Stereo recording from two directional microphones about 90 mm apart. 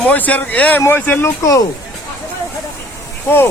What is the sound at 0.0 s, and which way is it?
Speech, 15° left (ahead or behind).